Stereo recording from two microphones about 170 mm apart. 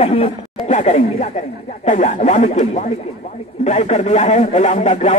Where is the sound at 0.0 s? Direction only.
35° left (ahead or behind).